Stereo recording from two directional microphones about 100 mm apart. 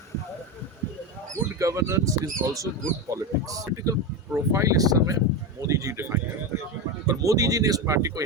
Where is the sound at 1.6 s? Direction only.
30° right (ahead or behind).